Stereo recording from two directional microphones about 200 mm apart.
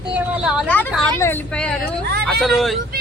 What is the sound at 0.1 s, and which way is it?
Speech, 5° right (ahead or behind).